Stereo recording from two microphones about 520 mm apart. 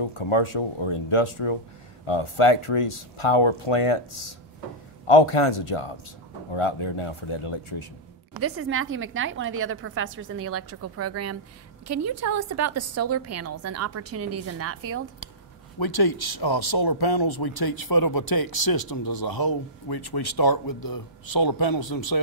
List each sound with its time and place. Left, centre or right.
0.0 s speech: left
8.4 s a woman's voice: right
15.8 s speech: left